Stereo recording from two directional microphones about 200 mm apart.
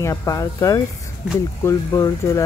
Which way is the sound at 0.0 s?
15° left (ahead or behind).